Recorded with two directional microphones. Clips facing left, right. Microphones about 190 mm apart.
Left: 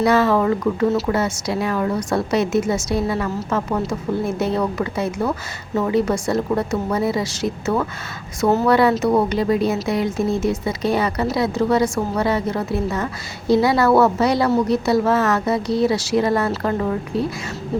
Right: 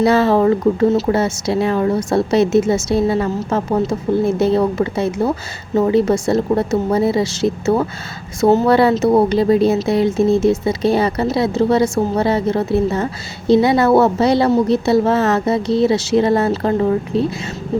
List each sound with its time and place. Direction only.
0.0 s a woman's voice: 30° right (ahead or behind)